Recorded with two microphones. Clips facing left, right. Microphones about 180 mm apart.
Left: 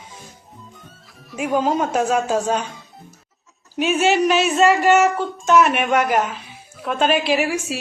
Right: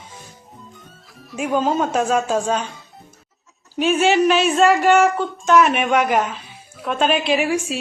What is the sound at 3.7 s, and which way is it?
Speech, 10° left (ahead or behind).